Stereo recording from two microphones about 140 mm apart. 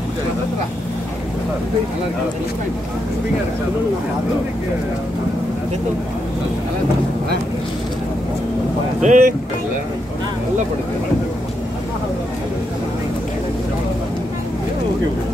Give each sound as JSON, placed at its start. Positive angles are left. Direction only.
{"t": 9.0, "sound": "speech", "side_deg": -65}